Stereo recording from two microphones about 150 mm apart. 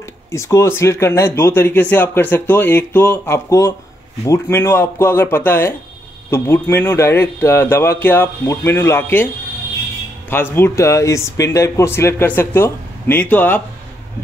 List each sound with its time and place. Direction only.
0.3 s speech: 20° left (ahead or behind)
10.3 s speech: 15° left (ahead or behind)